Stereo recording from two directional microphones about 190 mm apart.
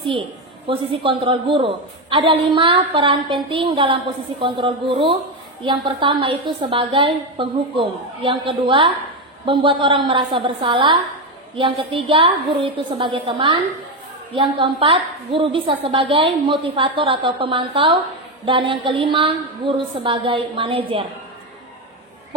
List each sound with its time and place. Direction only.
0.7 s a woman's voice: 30° right (ahead or behind)
14.6 s a woman's voice: 25° right (ahead or behind)